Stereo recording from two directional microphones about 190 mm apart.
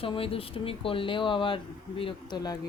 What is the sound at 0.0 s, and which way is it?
A woman's voice, 30° left (ahead or behind).